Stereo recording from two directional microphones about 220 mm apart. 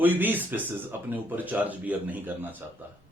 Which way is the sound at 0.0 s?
10° right (ahead or behind).